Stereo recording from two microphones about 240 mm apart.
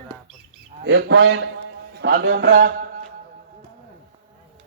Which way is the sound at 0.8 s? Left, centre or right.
Right.